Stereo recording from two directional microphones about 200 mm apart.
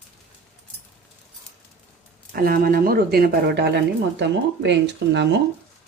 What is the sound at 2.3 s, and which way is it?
A woman's voice, 45° right (ahead or behind).